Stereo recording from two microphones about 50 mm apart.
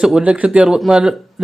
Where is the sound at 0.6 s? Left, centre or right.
Centre.